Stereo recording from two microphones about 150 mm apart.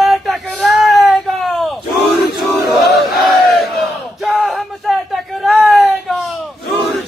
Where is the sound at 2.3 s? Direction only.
Centre (ahead or behind).